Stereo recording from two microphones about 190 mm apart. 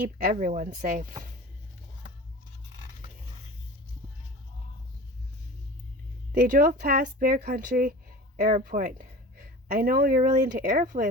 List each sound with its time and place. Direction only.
0.0 s speech: 50° right (ahead or behind)
6.3 s speech: 50° right (ahead or behind)